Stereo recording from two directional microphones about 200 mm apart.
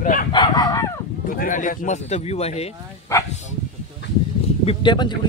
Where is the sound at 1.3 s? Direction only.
40° left (ahead or behind).